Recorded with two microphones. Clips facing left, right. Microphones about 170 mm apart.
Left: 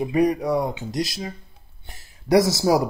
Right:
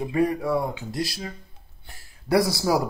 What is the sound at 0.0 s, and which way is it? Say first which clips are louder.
Speech: left 3 dB; 15° left (ahead or behind).